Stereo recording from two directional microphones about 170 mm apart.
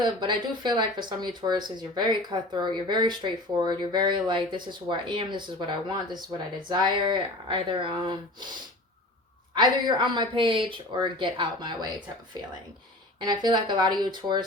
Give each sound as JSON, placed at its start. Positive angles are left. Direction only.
{"t": 0.0, "sound": "speech", "side_deg": -25}
{"t": 9.8, "sound": "speech", "side_deg": -30}
{"t": 13.1, "sound": "speech", "side_deg": -25}